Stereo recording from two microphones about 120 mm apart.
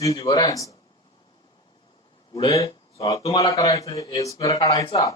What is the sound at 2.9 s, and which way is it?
A man's voice, 25° left (ahead or behind).